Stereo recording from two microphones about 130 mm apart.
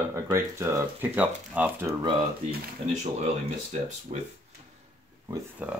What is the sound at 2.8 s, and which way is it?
Speech, 50° right (ahead or behind).